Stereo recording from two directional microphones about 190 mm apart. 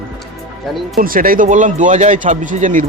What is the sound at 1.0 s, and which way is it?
Speech, 50° right (ahead or behind).